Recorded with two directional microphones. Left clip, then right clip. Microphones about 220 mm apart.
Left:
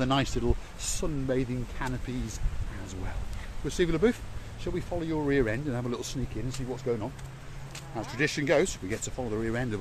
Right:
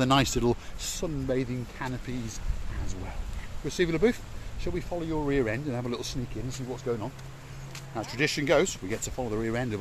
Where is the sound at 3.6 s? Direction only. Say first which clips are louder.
Right 1 dB; 5° right (ahead or behind).